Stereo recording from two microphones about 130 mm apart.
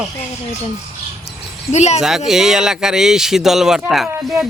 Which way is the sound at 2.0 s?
5° right (ahead or behind).